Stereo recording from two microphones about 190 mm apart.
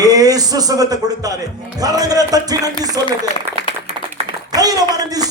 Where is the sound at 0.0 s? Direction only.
20° right (ahead or behind).